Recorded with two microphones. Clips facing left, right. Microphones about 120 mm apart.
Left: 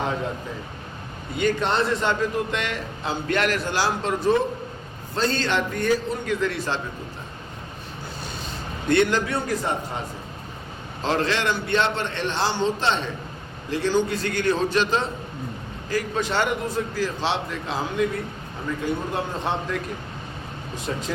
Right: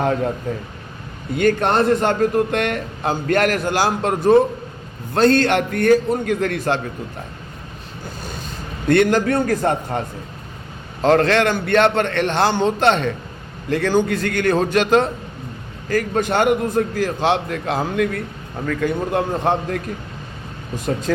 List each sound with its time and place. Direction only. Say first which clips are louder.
0.0 s a sound: right 7 dB; 55° right (ahead or behind)
0.5 s a man's voice: right 7 dB; 50° right (ahead or behind)
8.2 s a man's voice: right 2 dB; 45° right (ahead or behind)
11.0 s a man's voice: right 8 dB; 55° right (ahead or behind)